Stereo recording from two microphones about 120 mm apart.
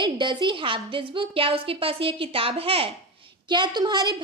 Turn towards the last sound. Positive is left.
turn(degrees=-35)  # may be behind; listen again after turning